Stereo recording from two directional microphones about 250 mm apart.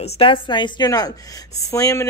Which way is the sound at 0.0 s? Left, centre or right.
Left.